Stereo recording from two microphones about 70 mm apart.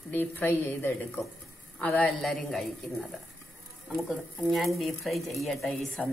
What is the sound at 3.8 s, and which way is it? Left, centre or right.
Speech, centre.